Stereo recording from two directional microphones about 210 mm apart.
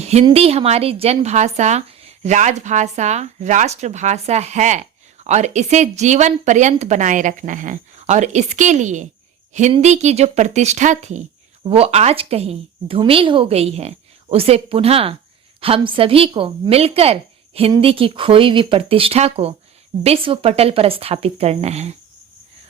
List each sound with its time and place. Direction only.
0.0 s a woman's voice: 30° right (ahead or behind)